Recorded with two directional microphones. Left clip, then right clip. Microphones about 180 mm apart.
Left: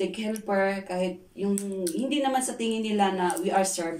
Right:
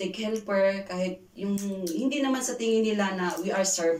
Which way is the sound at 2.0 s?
15° left (ahead or behind).